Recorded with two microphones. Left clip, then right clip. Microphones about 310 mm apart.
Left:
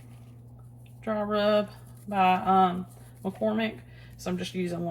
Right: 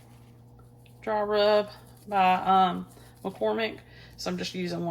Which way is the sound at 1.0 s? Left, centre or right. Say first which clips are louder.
Right 2 dB; right.